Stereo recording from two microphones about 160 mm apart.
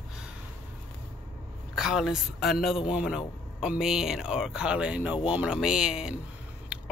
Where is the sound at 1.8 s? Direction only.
Centre (ahead or behind).